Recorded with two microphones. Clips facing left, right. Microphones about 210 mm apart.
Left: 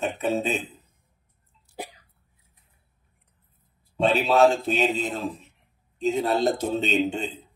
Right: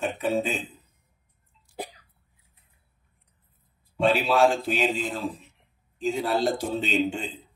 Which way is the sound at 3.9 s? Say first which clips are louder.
Left 2 dB; 20° left (ahead or behind).